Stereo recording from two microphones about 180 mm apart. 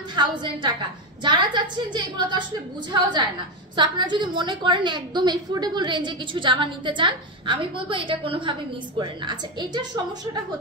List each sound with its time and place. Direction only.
0.1 s a woman's voice: 25° right (ahead or behind)